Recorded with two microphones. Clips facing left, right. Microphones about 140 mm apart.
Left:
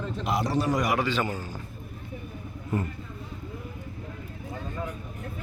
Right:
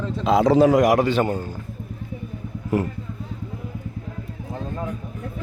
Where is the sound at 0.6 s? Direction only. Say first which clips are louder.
Right 10 dB; 85° right; by 1.4 s 60° right (ahead or behind).